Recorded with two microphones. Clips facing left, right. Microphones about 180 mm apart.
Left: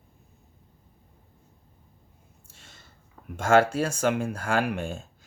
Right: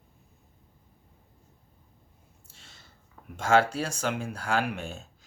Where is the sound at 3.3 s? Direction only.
50° left (ahead or behind).